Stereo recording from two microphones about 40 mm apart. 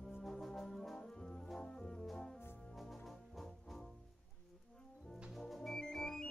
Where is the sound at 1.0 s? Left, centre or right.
Centre.